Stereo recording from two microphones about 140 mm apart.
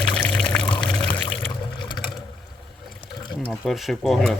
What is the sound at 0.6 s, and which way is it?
Pour, 35° left (ahead or behind).